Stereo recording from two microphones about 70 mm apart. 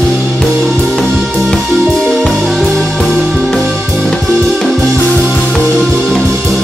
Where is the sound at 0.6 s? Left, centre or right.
Centre.